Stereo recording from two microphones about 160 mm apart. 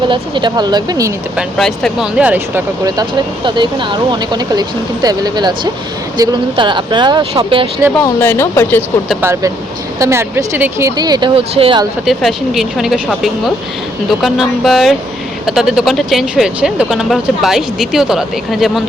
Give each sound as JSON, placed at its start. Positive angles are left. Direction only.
{"t": 0.1, "sound": "speech", "side_deg": -30}
{"t": 1.4, "sound": "speech", "side_deg": 5}
{"t": 2.8, "sound": "speech", "side_deg": -25}
{"t": 8.0, "sound": "speech", "side_deg": 15}
{"t": 9.2, "sound": "speech", "side_deg": -15}
{"t": 12.0, "sound": "speech", "side_deg": 0}